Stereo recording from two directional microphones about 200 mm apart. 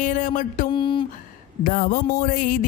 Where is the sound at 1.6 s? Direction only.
45° left (ahead or behind).